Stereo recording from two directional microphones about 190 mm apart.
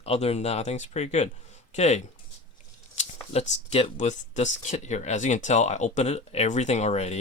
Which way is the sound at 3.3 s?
35° left (ahead or behind).